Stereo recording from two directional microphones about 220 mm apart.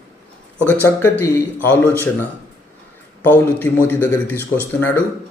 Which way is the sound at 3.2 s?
10° left (ahead or behind).